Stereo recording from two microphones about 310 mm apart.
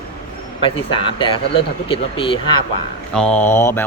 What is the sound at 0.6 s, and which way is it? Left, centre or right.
Speech, centre.